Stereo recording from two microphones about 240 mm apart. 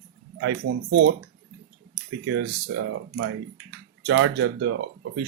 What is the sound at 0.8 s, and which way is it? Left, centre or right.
Speech, right.